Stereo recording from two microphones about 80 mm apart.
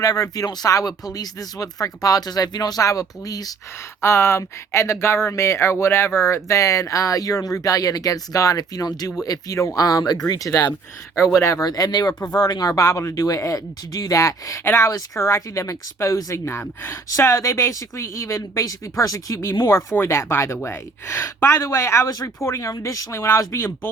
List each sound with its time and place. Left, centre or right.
0.0 s speech: left
4.0 s speech: left
20.0 s speech: left